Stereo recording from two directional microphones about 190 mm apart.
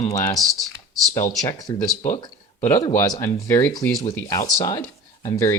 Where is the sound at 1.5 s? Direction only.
20° left (ahead or behind).